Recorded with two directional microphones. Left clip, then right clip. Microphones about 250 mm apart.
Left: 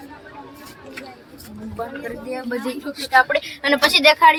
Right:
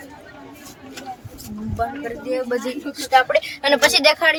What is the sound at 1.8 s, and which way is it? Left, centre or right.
Speech, centre.